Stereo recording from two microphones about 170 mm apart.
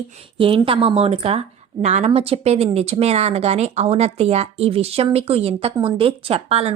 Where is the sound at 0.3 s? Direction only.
30° right (ahead or behind).